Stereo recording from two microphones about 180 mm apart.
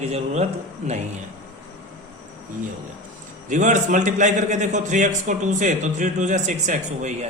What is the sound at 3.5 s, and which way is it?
A man's voice, 45° right (ahead or behind).